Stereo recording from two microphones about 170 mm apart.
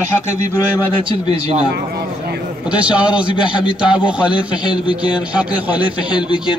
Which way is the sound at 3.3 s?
30° left (ahead or behind).